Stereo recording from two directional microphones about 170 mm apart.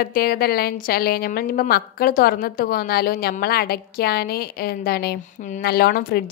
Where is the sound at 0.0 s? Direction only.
60° left (ahead or behind).